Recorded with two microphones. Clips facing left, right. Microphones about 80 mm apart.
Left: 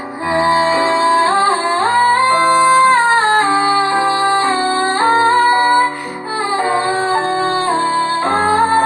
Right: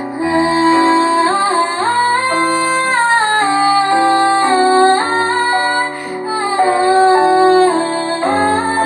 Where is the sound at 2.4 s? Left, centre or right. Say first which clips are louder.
Left 5 dB; left.